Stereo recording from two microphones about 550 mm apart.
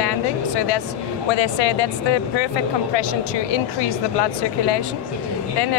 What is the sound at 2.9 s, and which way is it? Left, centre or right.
Speech, left.